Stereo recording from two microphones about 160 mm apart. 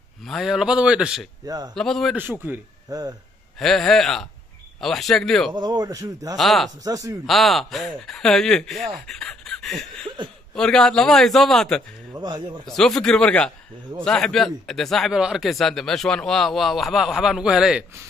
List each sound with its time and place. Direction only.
0.2 s speech: centre (ahead or behind)
1.4 s speech: 25° right (ahead or behind)
1.8 s speech: centre (ahead or behind)
2.9 s speech: 25° right (ahead or behind)
3.5 s speech: centre (ahead or behind)
5.5 s speech: 25° right (ahead or behind)
6.3 s speech: centre (ahead or behind)
6.8 s speech: 20° right (ahead or behind)
7.2 s speech: centre (ahead or behind)
12.1 s speech: 25° right (ahead or behind)
12.6 s speech: centre (ahead or behind)